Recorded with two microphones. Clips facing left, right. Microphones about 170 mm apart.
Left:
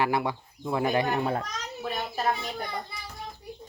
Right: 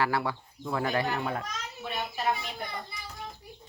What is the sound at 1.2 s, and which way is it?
Speech, 35° left (ahead or behind).